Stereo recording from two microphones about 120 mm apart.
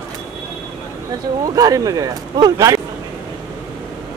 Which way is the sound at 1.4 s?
30° right (ahead or behind).